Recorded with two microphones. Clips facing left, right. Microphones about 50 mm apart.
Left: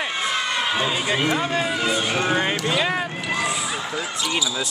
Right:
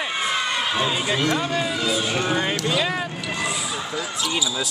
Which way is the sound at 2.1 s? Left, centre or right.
Left.